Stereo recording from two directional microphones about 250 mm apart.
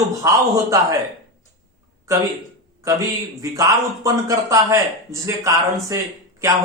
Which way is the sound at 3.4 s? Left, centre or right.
Centre.